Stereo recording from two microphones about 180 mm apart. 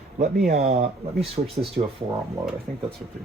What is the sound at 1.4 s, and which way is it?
Speech, 30° right (ahead or behind).